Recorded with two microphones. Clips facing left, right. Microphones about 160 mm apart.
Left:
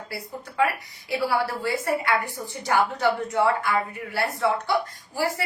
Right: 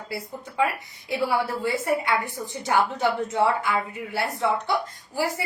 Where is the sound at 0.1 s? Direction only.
15° right (ahead or behind).